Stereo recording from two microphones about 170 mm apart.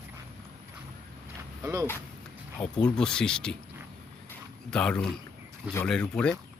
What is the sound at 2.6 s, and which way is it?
Speech, 5° left (ahead or behind).